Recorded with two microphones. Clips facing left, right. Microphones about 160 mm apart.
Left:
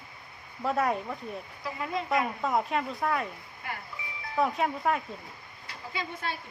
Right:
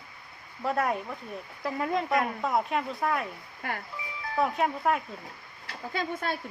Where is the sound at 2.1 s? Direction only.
Centre (ahead or behind).